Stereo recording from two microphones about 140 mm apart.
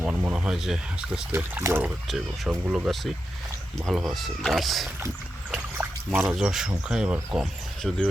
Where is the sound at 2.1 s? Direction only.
Centre (ahead or behind).